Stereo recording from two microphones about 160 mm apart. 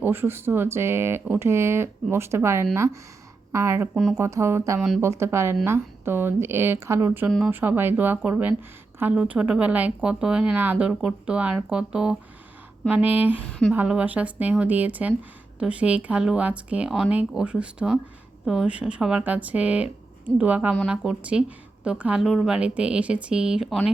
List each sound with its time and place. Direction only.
0.0 s a woman's voice: 15° right (ahead or behind)
3.9 s speech: 5° right (ahead or behind)
4.2 s a woman's voice: 15° right (ahead or behind)
7.3 s speech: centre (ahead or behind)
7.5 s a woman's voice: 10° right (ahead or behind)
13.5 s a woman's voice: 5° left (ahead or behind)
13.7 s a woman's voice: 10° right (ahead or behind)